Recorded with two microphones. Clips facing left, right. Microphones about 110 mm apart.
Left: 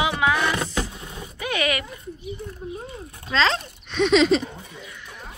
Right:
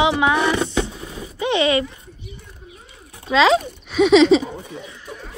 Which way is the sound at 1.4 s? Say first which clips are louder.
Right 7 dB; 25° right (ahead or behind).